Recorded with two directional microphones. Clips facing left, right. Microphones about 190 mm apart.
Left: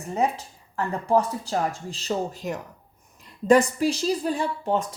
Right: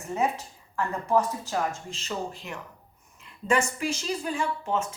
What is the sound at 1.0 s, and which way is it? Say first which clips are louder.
Speech: left 3 dB; 35° left (ahead or behind).